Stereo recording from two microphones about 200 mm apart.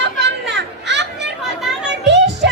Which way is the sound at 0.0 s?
60° right (ahead or behind).